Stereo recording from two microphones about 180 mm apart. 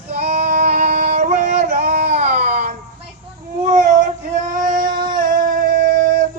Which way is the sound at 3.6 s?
40° right (ahead or behind).